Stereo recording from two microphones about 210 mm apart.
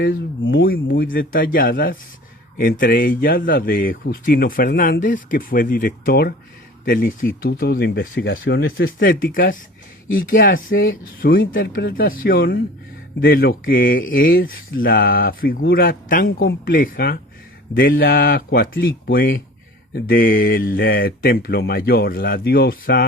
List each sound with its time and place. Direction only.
0.0 s a man's voice: 50° left (ahead or behind)